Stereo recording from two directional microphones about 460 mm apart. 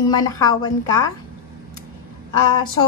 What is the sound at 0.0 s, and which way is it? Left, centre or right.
A woman's voice, centre.